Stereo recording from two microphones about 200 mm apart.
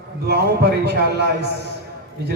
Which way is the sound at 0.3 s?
55° right (ahead or behind).